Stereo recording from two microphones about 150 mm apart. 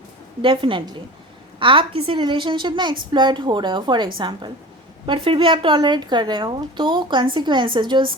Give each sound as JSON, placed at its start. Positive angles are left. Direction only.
{"t": 0.4, "sound": "a woman's voice", "side_deg": -35}